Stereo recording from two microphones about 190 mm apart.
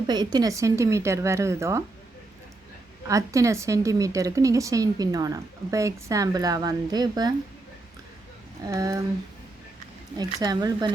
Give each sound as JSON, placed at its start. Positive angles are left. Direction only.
{"t": 0.1, "sound": "a woman's voice", "side_deg": -20}
{"t": 3.1, "sound": "a woman's voice", "side_deg": -15}
{"t": 8.6, "sound": "a woman's voice", "side_deg": -15}
{"t": 10.4, "sound": "speech", "side_deg": -20}